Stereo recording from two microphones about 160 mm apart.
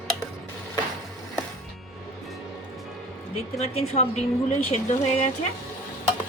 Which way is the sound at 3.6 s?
40° left (ahead or behind).